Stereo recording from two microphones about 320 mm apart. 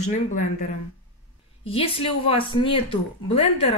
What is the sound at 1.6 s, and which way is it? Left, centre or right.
Speech, centre.